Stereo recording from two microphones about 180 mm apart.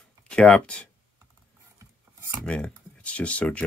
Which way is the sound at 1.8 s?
15° right (ahead or behind).